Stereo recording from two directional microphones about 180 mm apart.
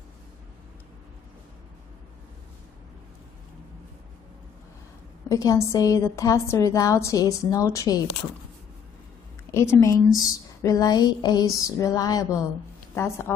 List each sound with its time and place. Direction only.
5.3 s a woman's voice: 20° left (ahead or behind)
9.5 s a woman's voice: 15° left (ahead or behind)